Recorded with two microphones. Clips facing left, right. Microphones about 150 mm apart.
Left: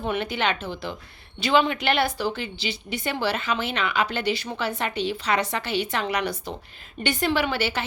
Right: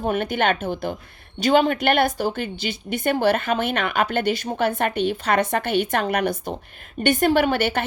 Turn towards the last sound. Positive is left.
turn(degrees=-55)  # may be behind; listen again after turning